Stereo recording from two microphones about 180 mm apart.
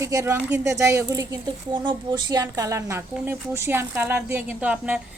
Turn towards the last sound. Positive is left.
turn(degrees=-5)  # may be behind; listen again after turning